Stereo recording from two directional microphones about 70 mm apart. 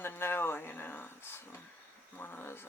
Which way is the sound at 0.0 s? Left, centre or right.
Left.